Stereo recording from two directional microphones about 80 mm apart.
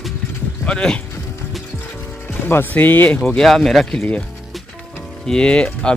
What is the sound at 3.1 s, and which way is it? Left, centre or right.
Speech, centre.